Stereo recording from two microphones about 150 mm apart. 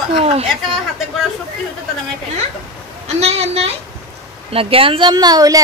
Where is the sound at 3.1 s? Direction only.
45° right (ahead or behind); by 5.6 s 25° right (ahead or behind).